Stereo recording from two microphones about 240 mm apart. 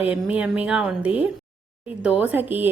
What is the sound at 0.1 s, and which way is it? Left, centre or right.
A woman's voice, centre.